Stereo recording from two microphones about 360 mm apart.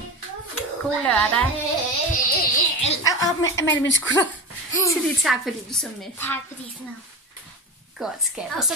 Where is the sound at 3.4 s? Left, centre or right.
Left.